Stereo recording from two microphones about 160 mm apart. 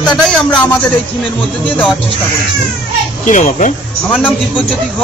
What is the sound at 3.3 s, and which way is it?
Speech, 50° left (ahead or behind).